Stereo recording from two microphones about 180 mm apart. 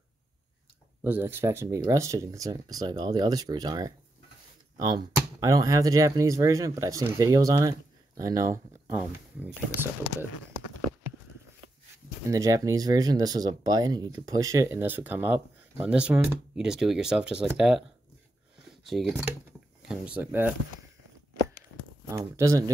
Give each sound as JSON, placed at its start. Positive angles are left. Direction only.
{"t": 1.0, "sound": "speech", "side_deg": -10}
{"t": 12.3, "sound": "speech", "side_deg": -20}
{"t": 22.0, "sound": "speech", "side_deg": -15}